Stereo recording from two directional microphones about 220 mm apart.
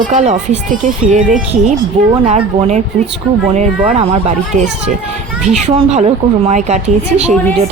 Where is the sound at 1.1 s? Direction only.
35° right (ahead or behind).